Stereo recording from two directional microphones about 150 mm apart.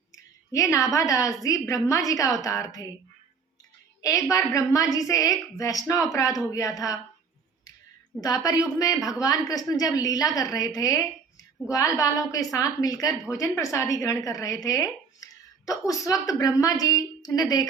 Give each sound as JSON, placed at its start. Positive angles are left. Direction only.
{"t": 0.2, "sound": "a woman's voice", "side_deg": 20}
{"t": 4.3, "sound": "a woman's voice", "side_deg": 20}
{"t": 8.2, "sound": "a woman's voice", "side_deg": 25}